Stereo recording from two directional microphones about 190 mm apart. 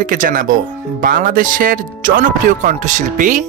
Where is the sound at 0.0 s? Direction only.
45° right (ahead or behind).